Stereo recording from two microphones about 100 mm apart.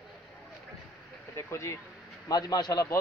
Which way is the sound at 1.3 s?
30° left (ahead or behind).